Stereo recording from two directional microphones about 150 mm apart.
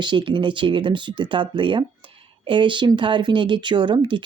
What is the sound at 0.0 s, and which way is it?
Speech, 30° right (ahead or behind).